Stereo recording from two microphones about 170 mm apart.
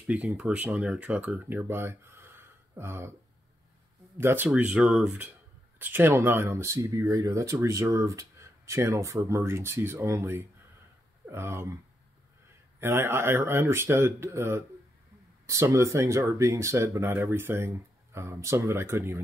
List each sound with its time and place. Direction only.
0.0 s speech: 10° right (ahead or behind)
4.2 s speech: 15° right (ahead or behind)
12.8 s speech: 15° right (ahead or behind)